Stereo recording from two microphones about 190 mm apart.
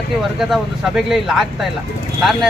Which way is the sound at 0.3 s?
Centre (ahead or behind).